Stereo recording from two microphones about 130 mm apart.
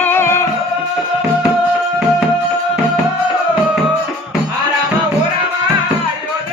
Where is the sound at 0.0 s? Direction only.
15° left (ahead or behind).